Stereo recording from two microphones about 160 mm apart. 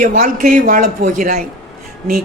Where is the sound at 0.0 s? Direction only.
55° right (ahead or behind).